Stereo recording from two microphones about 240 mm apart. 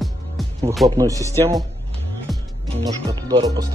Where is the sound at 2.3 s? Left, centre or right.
Centre.